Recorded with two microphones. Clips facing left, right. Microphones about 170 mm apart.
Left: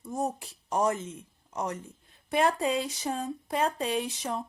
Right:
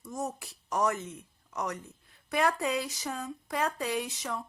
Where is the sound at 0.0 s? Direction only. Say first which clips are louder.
Left 4 dB; 30° left (ahead or behind).